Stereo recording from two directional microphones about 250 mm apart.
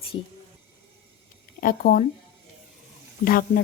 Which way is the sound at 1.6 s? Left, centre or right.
Left.